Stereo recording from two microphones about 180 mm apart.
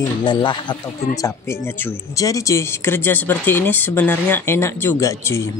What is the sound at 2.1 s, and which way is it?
Speech, 20° left (ahead or behind).